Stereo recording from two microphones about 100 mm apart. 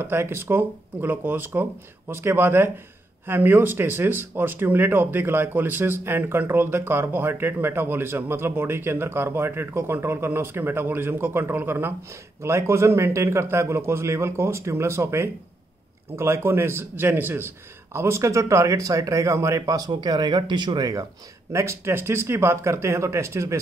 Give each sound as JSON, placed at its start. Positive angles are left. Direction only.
{"t": 0.0, "sound": "speech", "side_deg": -25}